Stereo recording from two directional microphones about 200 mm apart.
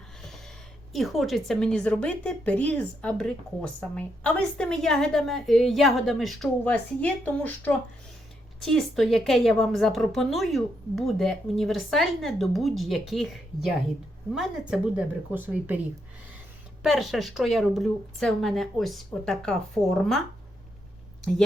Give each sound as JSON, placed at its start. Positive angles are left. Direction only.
{"t": 0.9, "sound": "a woman's voice", "side_deg": 0}
{"t": 16.8, "sound": "a woman's voice", "side_deg": 0}